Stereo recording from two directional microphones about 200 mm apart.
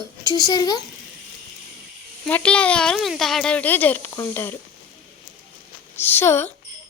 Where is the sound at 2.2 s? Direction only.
5° left (ahead or behind).